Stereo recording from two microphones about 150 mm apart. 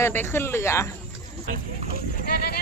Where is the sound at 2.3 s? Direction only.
90° left.